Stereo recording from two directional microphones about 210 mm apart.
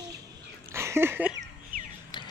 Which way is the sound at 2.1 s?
20° left (ahead or behind).